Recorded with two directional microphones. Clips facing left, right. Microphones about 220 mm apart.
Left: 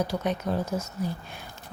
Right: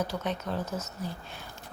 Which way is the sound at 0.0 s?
15° left (ahead or behind).